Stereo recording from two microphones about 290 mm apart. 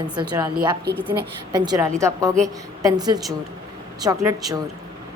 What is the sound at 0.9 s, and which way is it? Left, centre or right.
Speech, right.